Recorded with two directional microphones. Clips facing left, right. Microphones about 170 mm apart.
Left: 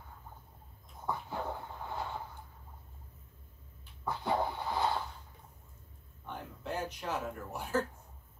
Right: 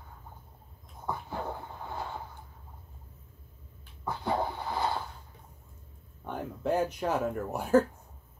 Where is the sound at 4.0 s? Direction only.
5° right (ahead or behind).